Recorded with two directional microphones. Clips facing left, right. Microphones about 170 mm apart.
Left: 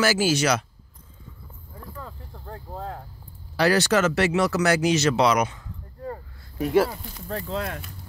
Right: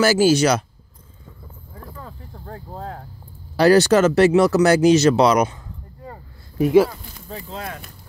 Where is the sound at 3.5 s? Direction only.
35° right (ahead or behind).